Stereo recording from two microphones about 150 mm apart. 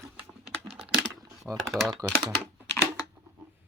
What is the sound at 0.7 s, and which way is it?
Typing, centre (ahead or behind).